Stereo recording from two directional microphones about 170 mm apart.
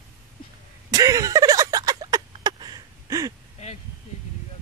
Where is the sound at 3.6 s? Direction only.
40° left (ahead or behind).